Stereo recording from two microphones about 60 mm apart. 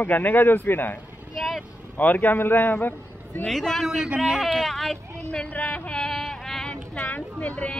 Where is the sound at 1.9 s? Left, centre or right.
Left.